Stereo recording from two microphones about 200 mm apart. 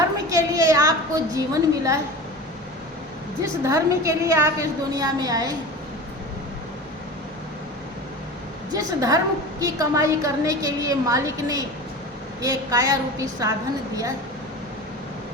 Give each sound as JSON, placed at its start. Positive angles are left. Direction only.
{"t": 0.3, "sound": "a woman's voice", "side_deg": -15}
{"t": 3.4, "sound": "a woman's voice", "side_deg": -15}
{"t": 8.7, "sound": "a woman's voice", "side_deg": -20}